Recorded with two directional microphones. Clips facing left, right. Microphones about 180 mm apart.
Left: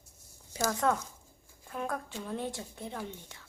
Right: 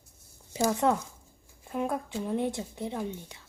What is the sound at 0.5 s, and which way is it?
A child's voice, 20° right (ahead or behind).